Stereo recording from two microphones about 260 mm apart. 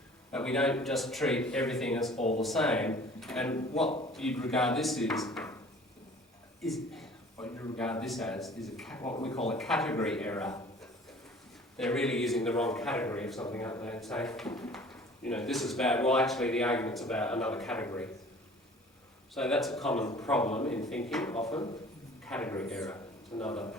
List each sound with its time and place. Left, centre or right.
0.3 s speech: centre
2.1 s speech: left
2.4 s speech: centre
6.6 s a sound: centre
7.3 s speech: centre
9.5 s speech: centre
11.8 s speech: centre
19.3 s a man's voice: centre